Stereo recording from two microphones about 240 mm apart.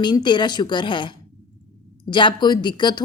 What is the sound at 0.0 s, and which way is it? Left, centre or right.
A woman's voice, centre.